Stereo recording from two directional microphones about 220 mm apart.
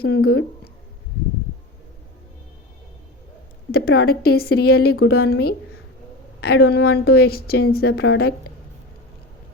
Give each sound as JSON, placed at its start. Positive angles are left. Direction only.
{"t": 0.0, "sound": "a woman's voice", "side_deg": 45}
{"t": 3.7, "sound": "a woman's voice", "side_deg": 45}